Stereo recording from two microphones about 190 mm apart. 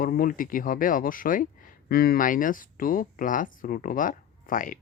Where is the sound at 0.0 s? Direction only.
50° left (ahead or behind).